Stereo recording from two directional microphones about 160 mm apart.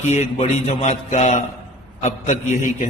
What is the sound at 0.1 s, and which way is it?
A man's voice, 45° left (ahead or behind).